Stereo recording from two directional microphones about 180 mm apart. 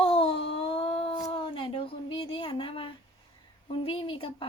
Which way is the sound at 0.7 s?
30° left (ahead or behind).